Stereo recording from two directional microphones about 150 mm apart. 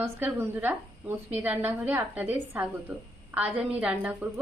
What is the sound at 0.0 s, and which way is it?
A woman's voice, 15° right (ahead or behind).